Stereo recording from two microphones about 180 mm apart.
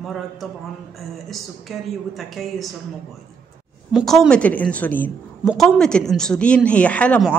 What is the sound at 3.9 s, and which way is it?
Speech, centre (ahead or behind).